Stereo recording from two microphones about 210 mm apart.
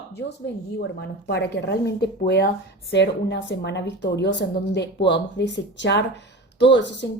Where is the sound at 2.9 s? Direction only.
55° left (ahead or behind).